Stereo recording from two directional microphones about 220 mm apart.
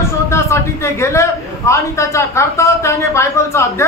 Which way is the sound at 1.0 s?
15° left (ahead or behind).